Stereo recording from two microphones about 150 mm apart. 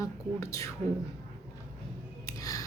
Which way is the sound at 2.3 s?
20° left (ahead or behind).